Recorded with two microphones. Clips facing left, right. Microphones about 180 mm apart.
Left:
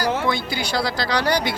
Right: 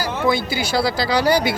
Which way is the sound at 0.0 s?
5° right (ahead or behind).